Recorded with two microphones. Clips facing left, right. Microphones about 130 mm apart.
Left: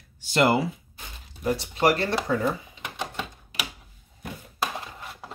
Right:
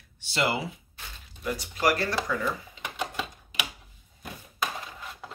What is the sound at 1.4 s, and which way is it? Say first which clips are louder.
Speech: left 5 dB; 30° left (ahead or behind).